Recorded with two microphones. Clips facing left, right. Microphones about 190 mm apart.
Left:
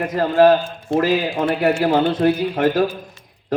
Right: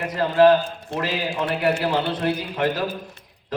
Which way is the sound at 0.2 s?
45° left (ahead or behind).